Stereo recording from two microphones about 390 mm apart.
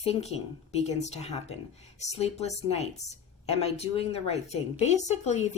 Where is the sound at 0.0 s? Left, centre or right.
Centre.